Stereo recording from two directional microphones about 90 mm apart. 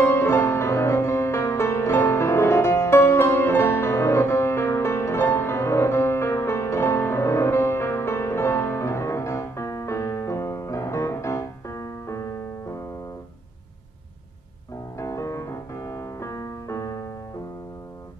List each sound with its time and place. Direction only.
0.0 s music: 30° left (ahead or behind)
15.0 s music: 35° left (ahead or behind)